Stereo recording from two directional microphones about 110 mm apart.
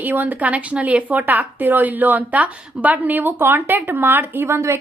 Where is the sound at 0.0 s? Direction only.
15° right (ahead or behind).